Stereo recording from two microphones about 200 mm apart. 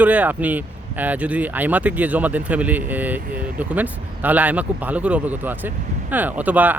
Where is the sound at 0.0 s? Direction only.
10° right (ahead or behind).